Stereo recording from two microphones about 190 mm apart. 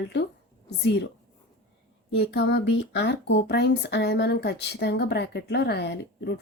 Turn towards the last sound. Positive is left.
turn(degrees=60)  # may be behind; listen again after turning